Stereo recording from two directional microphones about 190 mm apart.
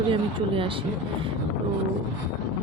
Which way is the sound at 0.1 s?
25° right (ahead or behind).